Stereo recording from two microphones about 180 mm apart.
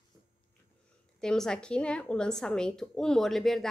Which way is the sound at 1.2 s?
5° left (ahead or behind).